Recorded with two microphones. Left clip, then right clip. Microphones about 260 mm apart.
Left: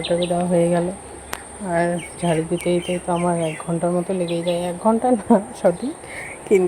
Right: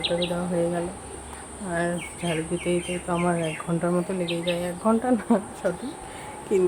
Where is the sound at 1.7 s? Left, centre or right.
Centre.